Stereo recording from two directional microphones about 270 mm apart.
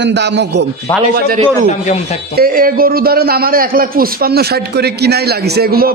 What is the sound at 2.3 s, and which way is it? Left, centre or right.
A man's voice, right.